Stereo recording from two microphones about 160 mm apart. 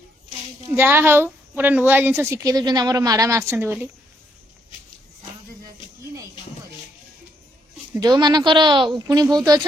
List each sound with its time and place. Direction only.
0.7 s a woman's voice: 15° right (ahead or behind)
8.0 s speech: 25° right (ahead or behind)